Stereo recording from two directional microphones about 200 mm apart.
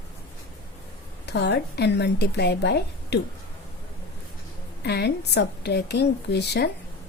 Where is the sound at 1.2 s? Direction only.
55° left (ahead or behind).